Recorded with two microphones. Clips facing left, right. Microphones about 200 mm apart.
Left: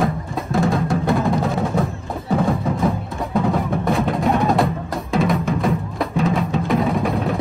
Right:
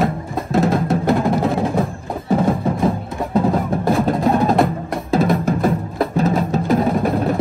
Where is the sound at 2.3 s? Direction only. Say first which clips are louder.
Right 2 dB; 25° right (ahead or behind).